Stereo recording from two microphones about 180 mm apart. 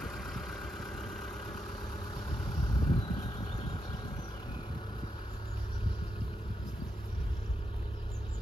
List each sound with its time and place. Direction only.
0.0 s vehicle: centre (ahead or behind)
2.7 s vehicle: 20° left (ahead or behind)